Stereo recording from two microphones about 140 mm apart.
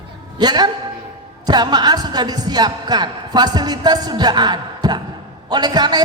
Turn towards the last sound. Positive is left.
turn(degrees=-30)  # may be behind; listen again after turning